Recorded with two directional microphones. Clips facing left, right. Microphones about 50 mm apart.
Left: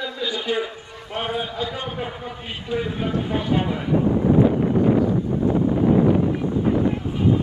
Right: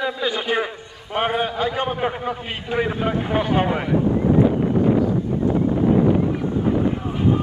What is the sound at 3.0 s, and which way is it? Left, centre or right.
Speech, right.